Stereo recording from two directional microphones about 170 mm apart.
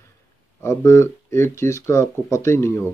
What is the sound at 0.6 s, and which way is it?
Speech, 15° left (ahead or behind).